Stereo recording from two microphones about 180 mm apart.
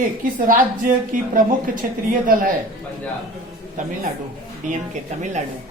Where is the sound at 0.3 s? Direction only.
50° right (ahead or behind).